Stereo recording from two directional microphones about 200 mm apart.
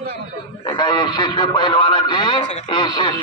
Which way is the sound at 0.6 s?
25° left (ahead or behind).